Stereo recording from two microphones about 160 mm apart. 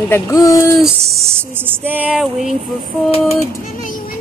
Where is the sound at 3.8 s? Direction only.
60° left (ahead or behind).